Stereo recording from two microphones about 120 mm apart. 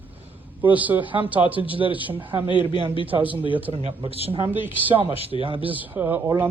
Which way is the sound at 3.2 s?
15° right (ahead or behind).